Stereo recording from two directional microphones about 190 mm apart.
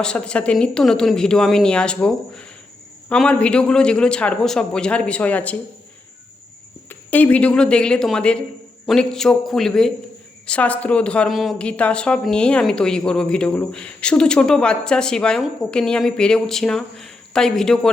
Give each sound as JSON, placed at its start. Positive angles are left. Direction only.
{"t": 0.0, "sound": "speech", "side_deg": 5}
{"t": 6.8, "sound": "speech", "side_deg": 10}